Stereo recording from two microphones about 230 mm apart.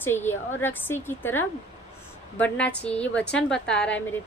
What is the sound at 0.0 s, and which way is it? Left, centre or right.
A woman's voice, centre.